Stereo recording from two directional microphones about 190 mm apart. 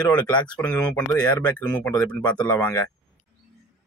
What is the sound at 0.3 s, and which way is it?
Speech, 5° left (ahead or behind).